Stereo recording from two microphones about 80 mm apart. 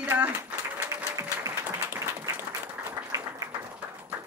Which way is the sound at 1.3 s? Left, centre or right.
Right.